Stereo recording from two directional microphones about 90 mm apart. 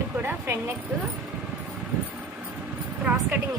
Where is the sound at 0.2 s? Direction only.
25° right (ahead or behind).